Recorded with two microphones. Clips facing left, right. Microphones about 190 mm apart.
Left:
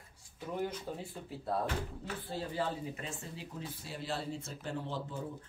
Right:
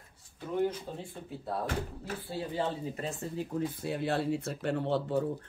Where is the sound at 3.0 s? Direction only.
40° right (ahead or behind).